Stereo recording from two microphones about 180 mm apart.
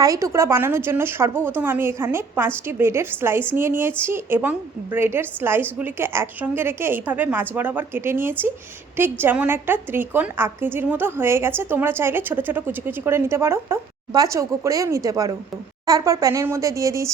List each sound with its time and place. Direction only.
0.0 s a woman's voice: 20° right (ahead or behind)